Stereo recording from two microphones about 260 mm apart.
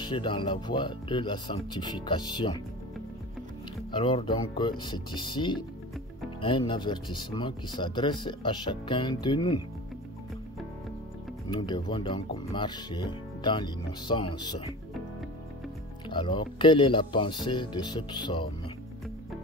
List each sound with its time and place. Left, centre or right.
0.0 s speech: centre
3.9 s speech: centre
11.5 s speech: centre
16.1 s speech: centre